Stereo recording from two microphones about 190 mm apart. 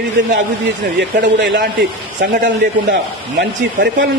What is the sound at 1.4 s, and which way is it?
Speech, 65° right (ahead or behind).